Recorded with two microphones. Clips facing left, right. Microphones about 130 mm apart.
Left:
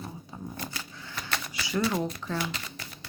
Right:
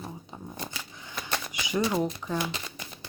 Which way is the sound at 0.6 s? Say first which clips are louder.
Even; 20° right (ahead or behind).